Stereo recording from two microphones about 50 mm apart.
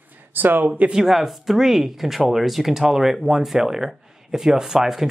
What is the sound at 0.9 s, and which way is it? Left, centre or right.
Speech, centre.